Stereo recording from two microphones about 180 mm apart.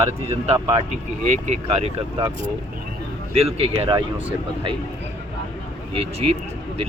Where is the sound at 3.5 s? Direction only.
30° right (ahead or behind).